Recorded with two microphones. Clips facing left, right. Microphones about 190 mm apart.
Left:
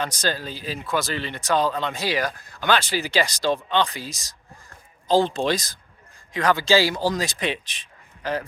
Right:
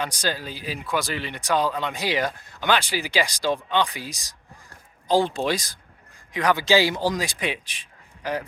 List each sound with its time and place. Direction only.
0.0 s speech: 10° right (ahead or behind)